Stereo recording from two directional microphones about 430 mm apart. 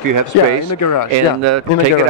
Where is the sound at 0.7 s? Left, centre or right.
Left.